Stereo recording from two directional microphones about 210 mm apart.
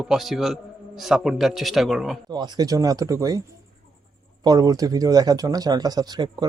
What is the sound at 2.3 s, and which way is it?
Speech, 20° right (ahead or behind).